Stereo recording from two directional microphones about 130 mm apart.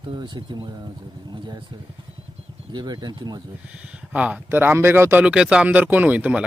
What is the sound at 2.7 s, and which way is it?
Speech, 35° right (ahead or behind).